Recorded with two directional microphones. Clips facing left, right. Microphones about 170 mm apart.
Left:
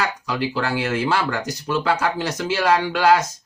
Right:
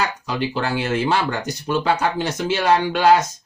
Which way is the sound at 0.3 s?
25° right (ahead or behind).